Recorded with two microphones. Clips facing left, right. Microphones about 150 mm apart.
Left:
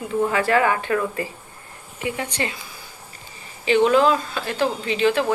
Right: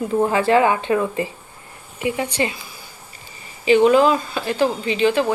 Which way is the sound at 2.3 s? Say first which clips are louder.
Right 5 dB; 10° right (ahead or behind).